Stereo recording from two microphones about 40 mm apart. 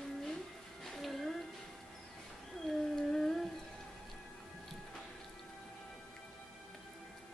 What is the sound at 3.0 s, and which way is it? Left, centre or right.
Humming, centre.